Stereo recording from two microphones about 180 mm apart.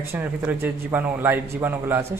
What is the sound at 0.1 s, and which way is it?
A man's voice, 10° right (ahead or behind).